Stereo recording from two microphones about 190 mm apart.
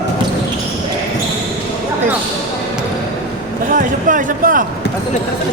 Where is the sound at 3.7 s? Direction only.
45° right (ahead or behind).